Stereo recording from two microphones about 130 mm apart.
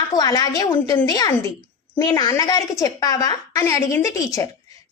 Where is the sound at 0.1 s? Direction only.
30° left (ahead or behind).